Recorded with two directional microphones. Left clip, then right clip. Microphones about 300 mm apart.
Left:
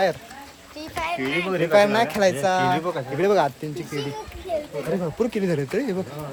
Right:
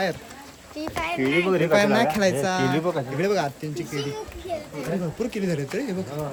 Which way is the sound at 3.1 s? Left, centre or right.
Centre.